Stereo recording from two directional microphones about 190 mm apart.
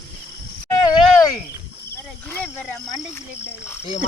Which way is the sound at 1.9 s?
10° left (ahead or behind).